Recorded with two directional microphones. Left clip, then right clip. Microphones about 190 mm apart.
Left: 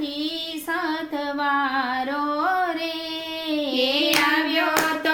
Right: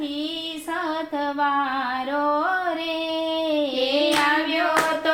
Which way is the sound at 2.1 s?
30° left (ahead or behind).